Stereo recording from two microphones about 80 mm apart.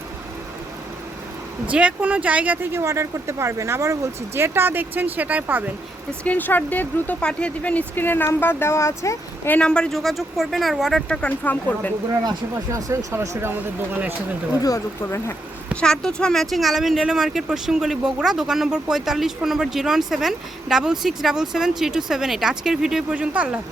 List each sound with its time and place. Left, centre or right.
1.7 s speech: centre
2.8 s speech: right
6.2 s speech: left
9.6 s speech: centre
10.0 s speech: centre
11.1 s speech: centre
12.7 s speech: right
14.6 s speech: left
15.7 s speech: centre
23.0 s speech: centre